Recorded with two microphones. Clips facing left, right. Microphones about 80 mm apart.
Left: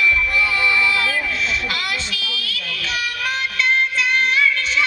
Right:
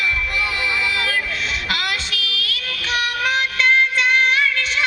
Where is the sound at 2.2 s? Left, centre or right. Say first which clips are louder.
Right 2 dB; left.